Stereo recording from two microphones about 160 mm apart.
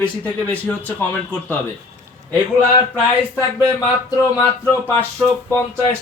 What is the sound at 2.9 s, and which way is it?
Speech, 20° left (ahead or behind).